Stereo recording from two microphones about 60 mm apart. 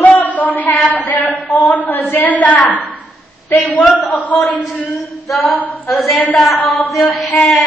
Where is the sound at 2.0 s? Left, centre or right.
Left.